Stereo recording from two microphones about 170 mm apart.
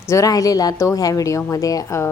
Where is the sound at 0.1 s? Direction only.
20° left (ahead or behind).